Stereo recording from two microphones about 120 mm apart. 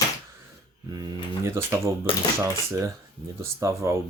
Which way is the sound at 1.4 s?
20° right (ahead or behind).